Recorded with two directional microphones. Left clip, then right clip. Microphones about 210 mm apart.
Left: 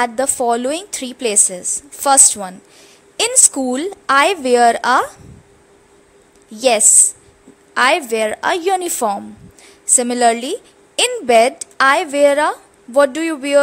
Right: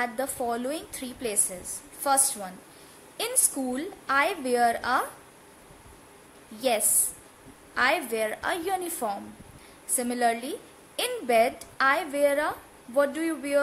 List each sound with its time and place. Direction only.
0.0 s a woman's voice: 40° left (ahead or behind)
6.5 s a woman's voice: 40° left (ahead or behind)